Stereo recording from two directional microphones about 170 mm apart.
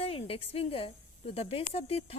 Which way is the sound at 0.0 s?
35° left (ahead or behind).